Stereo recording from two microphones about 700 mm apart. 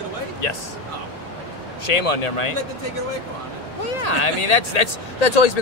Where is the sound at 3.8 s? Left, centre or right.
Left.